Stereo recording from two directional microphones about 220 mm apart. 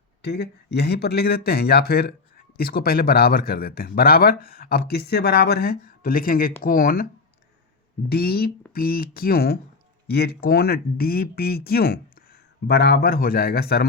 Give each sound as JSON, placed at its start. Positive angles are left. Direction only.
{"t": 0.2, "sound": "a man's voice", "side_deg": 50}
{"t": 8.1, "sound": "a man's voice", "side_deg": 45}